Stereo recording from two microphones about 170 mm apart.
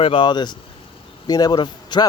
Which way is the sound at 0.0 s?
30° left (ahead or behind).